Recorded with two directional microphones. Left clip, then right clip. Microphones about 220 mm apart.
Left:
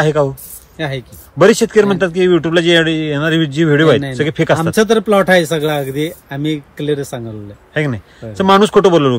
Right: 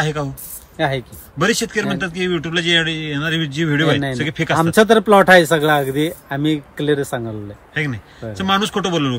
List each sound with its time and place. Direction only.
0.0 s speech: centre (ahead or behind)
0.7 s speech: 15° right (ahead or behind)
1.4 s speech: centre (ahead or behind)
4.7 s speech: 15° right (ahead or behind)
7.7 s speech: centre (ahead or behind)